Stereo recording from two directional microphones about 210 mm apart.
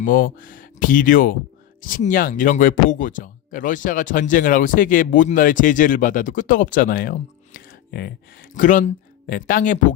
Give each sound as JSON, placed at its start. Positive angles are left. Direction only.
{"t": 0.0, "sound": "speech", "side_deg": 40}